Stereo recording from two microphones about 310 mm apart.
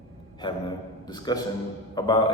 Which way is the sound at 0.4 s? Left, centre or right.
Centre.